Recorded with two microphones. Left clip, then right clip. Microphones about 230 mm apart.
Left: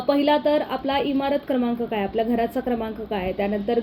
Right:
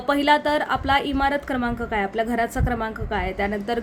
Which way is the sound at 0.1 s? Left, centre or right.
Right.